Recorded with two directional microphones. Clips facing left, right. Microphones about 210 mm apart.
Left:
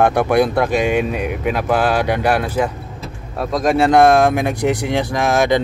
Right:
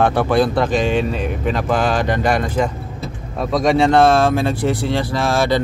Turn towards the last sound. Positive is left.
turn(degrees=15)  # may be behind; listen again after turning